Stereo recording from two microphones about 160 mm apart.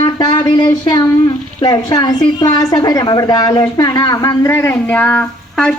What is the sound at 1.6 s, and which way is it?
A woman's voice, 25° left (ahead or behind).